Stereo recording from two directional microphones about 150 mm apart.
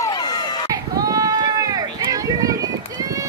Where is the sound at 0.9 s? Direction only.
25° right (ahead or behind).